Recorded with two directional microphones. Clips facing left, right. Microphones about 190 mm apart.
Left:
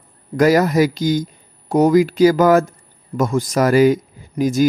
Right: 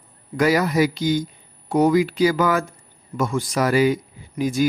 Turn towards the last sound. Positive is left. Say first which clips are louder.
# left 4 dB
turn(degrees=45)  # may be behind; listen again after turning